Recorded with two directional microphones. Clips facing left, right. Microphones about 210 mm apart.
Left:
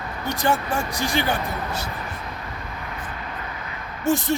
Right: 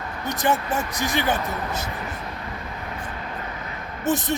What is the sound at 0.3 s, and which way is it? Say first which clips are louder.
Speech: even; 20° right (ahead or behind).